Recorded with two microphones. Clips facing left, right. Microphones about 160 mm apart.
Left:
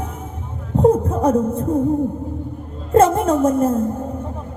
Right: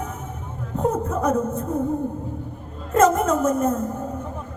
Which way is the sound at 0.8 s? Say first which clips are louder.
Left 8 dB; 30° left (ahead or behind).